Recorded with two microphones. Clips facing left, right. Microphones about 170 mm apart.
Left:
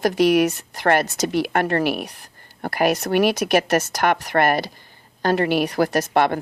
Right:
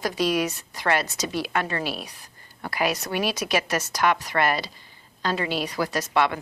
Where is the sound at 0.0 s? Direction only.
60° left (ahead or behind).